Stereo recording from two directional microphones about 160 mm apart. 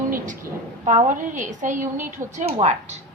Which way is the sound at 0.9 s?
50° right (ahead or behind).